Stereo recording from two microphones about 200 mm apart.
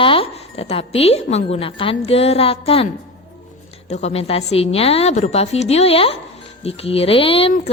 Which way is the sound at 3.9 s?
30° left (ahead or behind).